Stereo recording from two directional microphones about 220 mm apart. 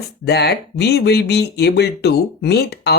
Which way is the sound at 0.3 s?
50° left (ahead or behind).